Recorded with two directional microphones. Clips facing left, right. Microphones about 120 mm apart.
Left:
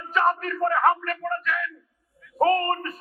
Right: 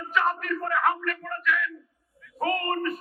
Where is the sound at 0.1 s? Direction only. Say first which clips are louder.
Left 3 dB; 35° left (ahead or behind).